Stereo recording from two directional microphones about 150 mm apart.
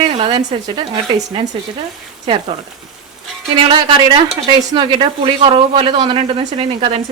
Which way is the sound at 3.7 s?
35° right (ahead or behind).